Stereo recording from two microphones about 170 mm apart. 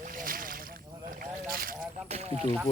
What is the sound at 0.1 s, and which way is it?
Boat, 55° right (ahead or behind).